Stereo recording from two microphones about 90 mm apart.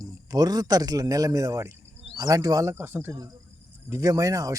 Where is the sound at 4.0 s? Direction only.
40° right (ahead or behind).